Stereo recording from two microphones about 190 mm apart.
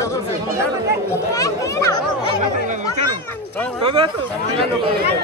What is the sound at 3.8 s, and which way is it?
Speech, 25° right (ahead or behind).